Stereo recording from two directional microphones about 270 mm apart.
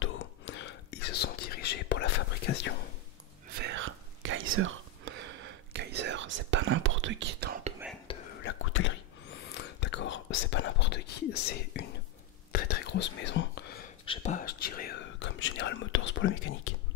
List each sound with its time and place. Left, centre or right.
0.0 s whispering: left
3.5 s whispering: right
8.1 s whispering: centre
8.5 s whispering: left
14.0 s whispering: left